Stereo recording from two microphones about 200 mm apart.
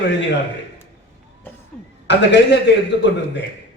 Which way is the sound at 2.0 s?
60° left (ahead or behind).